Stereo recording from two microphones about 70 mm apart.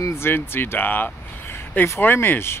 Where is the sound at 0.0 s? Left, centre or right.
Left.